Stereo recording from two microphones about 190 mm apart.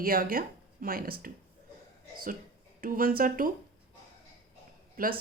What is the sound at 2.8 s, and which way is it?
Speech, 50° right (ahead or behind).